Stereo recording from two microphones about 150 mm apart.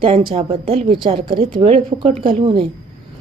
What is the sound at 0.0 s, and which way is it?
Speech, 35° right (ahead or behind).